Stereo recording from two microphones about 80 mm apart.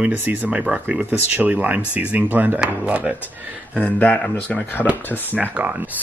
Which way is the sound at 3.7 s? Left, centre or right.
Left.